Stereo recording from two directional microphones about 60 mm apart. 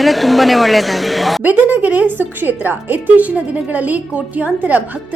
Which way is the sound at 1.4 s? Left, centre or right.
Right.